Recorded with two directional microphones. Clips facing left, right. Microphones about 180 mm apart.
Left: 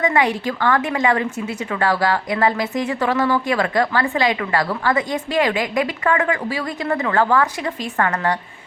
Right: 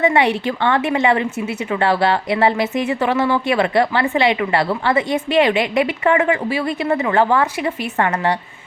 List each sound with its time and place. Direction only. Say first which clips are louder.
0.0 s a woman's voice: right 3 dB; 30° right (ahead or behind)